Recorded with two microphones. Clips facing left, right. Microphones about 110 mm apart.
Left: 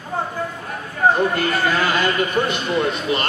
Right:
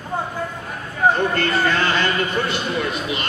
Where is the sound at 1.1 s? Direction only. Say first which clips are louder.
Left 1 dB; 10° left (ahead or behind).